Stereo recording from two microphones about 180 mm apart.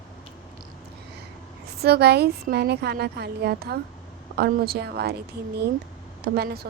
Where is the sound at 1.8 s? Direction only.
65° right (ahead or behind).